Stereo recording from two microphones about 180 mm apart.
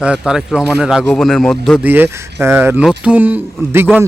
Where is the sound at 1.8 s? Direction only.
10° right (ahead or behind).